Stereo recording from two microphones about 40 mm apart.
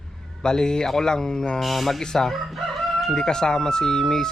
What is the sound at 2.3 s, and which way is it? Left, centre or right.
Speech, centre.